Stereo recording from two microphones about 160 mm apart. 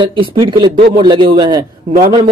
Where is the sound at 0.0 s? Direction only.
30° right (ahead or behind).